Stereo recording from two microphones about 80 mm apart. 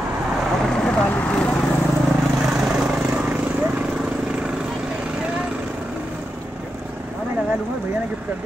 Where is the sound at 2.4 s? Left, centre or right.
Centre.